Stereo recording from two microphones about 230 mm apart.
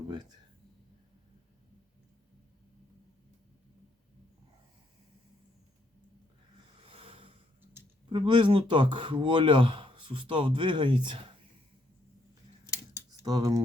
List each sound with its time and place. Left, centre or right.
6.8 s a sound: right
8.1 s speech: right
13.2 s speech: centre